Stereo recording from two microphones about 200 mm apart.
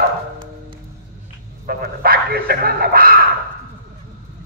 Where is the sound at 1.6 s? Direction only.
50° right (ahead or behind).